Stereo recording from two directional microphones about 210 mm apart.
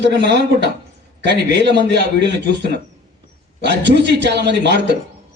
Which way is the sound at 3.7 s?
55° right (ahead or behind).